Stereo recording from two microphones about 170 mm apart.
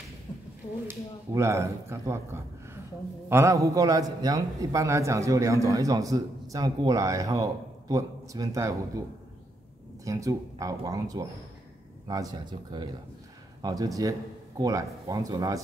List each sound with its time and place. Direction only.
0.8 s a man's voice: 15° right (ahead or behind)
10.0 s a man's voice: 20° right (ahead or behind)